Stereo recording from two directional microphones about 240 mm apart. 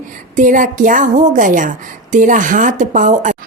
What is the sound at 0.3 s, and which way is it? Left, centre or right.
A woman's voice, right.